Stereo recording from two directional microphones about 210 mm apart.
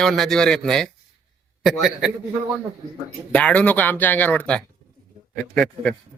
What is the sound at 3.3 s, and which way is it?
A man's voice, 5° left (ahead or behind).